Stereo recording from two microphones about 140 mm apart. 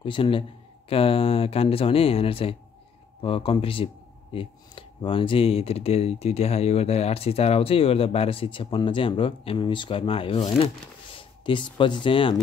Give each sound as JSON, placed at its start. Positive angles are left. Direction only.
{"t": 0.0, "sound": "speech", "side_deg": 40}